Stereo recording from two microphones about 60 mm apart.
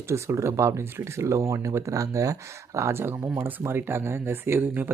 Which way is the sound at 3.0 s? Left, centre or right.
Right.